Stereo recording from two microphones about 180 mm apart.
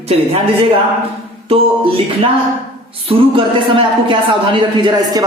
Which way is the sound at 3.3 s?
30° right (ahead or behind).